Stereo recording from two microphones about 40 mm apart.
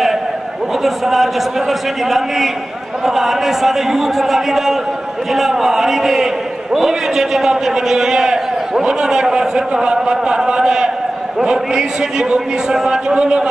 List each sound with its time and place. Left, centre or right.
0.8 s a man's voice: centre
13.1 s a man's voice: right